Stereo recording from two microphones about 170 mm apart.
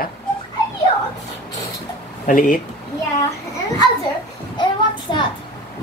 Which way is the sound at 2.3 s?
50° left (ahead or behind).